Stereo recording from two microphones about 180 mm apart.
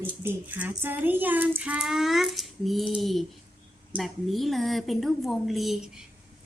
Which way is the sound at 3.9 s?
Centre (ahead or behind).